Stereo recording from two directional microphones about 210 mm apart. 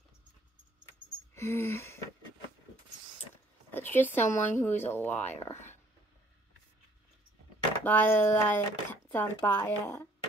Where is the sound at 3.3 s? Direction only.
10° left (ahead or behind).